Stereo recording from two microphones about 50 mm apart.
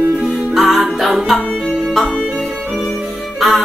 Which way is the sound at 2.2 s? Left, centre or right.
Right.